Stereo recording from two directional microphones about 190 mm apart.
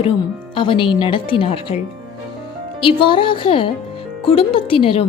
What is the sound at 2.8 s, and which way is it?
Speech, 25° left (ahead or behind).